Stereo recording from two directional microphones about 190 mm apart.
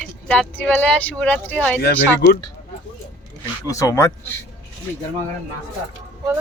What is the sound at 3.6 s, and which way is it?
Speech, 15° left (ahead or behind).